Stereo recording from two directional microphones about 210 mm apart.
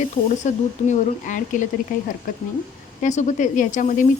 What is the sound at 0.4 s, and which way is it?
Speech, 35° left (ahead or behind).